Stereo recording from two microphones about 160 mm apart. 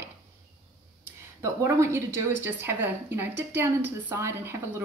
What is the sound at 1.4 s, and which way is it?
A woman's voice, 20° right (ahead or behind).